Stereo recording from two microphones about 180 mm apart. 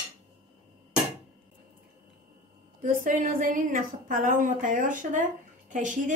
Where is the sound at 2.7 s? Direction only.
45° right (ahead or behind).